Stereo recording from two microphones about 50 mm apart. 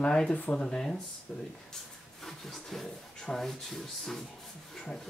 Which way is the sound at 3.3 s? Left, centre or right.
Centre.